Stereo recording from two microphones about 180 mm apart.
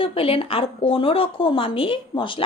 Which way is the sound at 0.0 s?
30° left (ahead or behind).